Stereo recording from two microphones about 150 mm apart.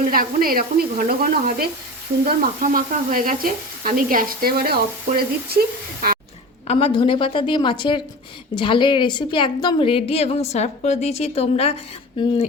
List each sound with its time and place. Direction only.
0.0 s sizzle: 70° right (ahead or behind)
2.2 s sizzle: 70° right (ahead or behind); by 6.1 s 90° right
6.7 s a woman's voice: 40° left (ahead or behind)